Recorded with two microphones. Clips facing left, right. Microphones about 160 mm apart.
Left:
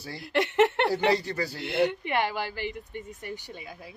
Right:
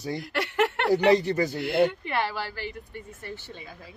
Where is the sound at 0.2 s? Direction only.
20° left (ahead or behind).